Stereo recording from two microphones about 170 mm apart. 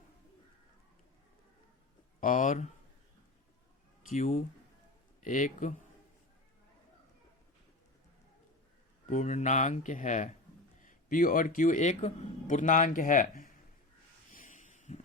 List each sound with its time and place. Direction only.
2.2 s speech: 50° left (ahead or behind)
4.1 s speech: 40° left (ahead or behind)
9.0 s a man's voice: 45° left (ahead or behind)
14.3 s a sound: 50° left (ahead or behind)